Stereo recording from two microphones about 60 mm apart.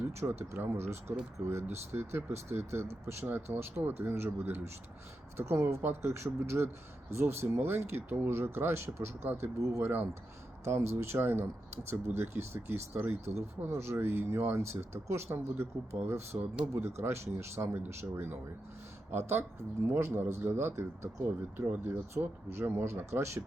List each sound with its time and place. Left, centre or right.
0.3 s speech: right
1.4 s speech: right
9.6 s speech: right
9.8 s speech: right
10.6 s speech: right
21.7 s speech: right